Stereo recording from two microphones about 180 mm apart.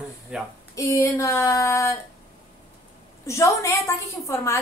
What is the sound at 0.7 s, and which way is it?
A woman's voice, 15° left (ahead or behind).